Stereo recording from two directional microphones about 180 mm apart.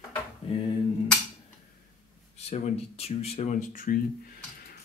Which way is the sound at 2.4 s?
35° left (ahead or behind).